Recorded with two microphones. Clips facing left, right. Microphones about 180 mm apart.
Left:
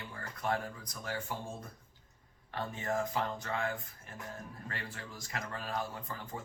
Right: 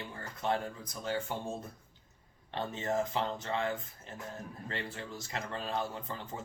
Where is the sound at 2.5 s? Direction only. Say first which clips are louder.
Right 2 dB; 25° right (ahead or behind).